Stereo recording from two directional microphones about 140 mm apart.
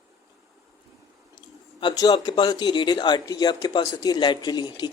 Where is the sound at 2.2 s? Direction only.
35° left (ahead or behind).